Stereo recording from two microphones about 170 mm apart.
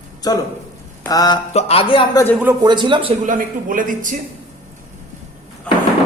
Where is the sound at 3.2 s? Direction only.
50° right (ahead or behind).